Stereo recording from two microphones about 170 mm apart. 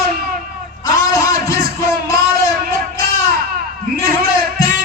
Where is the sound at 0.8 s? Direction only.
20° left (ahead or behind).